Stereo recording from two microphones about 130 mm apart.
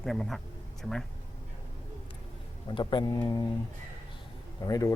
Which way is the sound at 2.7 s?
40° left (ahead or behind).